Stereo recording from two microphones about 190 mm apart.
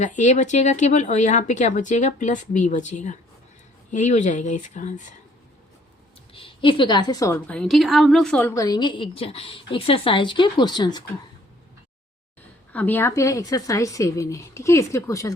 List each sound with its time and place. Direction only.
0.0 s speech: 40° left (ahead or behind)
6.3 s a woman's voice: 25° left (ahead or behind)
12.7 s speech: 10° left (ahead or behind)